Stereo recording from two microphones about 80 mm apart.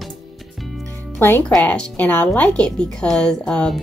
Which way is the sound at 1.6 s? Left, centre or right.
Centre.